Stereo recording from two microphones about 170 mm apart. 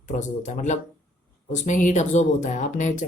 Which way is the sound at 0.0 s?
45° left (ahead or behind).